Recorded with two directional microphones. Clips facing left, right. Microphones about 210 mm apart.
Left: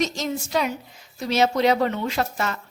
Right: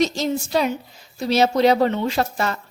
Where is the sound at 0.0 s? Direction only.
30° right (ahead or behind).